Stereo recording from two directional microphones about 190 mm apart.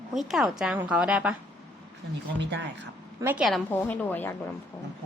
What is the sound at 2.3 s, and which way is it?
Speech, 70° right (ahead or behind).